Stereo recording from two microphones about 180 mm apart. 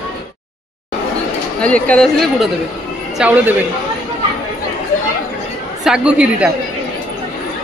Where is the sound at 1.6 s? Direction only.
5° left (ahead or behind); by 3.6 s 10° right (ahead or behind).